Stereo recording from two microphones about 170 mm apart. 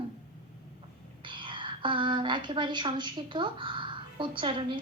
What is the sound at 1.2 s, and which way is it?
A woman's voice, 30° right (ahead or behind).